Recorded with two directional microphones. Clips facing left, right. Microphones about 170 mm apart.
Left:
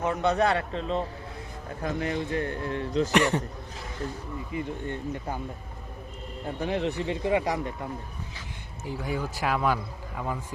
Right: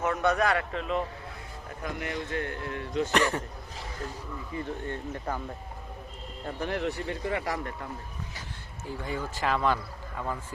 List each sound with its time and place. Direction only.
0.0 s a man's voice: 20° left (ahead or behind)
3.1 s speech: 15° left (ahead or behind)
4.5 s a man's voice: 20° left (ahead or behind)
6.6 s speech: 20° left (ahead or behind)
9.0 s speech: 10° left (ahead or behind)